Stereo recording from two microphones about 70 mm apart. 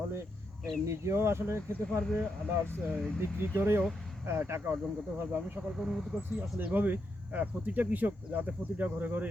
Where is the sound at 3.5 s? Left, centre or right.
Right.